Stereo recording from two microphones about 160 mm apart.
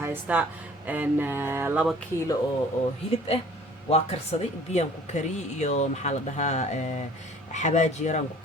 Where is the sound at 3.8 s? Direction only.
40° left (ahead or behind).